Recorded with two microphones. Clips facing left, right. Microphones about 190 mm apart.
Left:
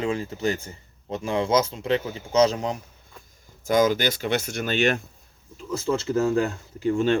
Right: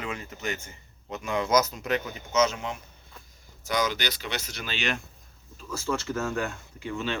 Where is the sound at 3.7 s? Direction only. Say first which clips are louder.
Left 8 dB; 50° left (ahead or behind).